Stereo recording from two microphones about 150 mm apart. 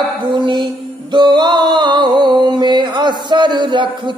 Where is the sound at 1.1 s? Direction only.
30° right (ahead or behind).